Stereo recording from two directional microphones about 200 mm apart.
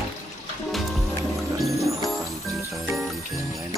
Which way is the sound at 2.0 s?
Centre (ahead or behind).